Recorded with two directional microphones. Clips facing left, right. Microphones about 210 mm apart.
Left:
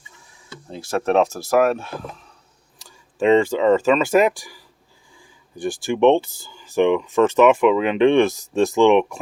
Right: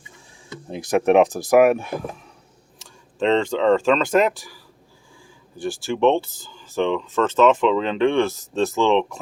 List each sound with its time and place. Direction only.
0.7 s speech: 15° right (ahead or behind)
2.7 s speech: 5° left (ahead or behind)